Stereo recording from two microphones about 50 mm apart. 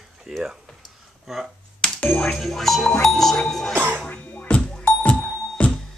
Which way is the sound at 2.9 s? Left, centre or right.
Centre.